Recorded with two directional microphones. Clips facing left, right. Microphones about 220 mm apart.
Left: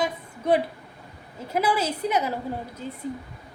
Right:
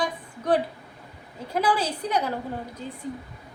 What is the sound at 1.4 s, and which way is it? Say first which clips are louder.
Speech: even; 10° left (ahead or behind).